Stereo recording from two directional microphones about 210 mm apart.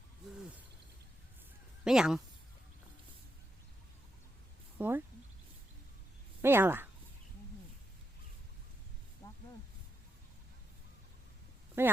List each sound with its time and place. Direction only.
1.8 s speech: centre (ahead or behind)
4.8 s speech: 10° right (ahead or behind)
6.4 s speech: 10° right (ahead or behind)
9.2 s a sound: 15° left (ahead or behind)
11.8 s speech: 10° right (ahead or behind)